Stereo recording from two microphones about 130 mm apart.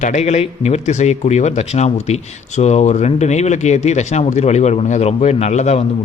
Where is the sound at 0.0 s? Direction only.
60° left (ahead or behind).